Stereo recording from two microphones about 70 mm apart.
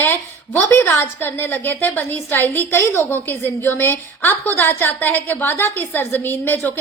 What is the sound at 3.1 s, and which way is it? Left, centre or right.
A woman's voice, left.